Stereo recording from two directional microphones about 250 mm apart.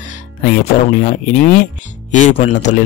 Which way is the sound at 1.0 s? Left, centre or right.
Left.